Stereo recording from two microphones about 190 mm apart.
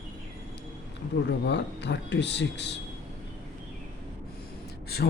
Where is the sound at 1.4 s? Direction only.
65° left (ahead or behind).